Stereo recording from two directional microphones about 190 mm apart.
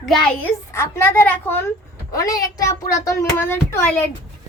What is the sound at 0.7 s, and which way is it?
A child's voice, 15° left (ahead or behind).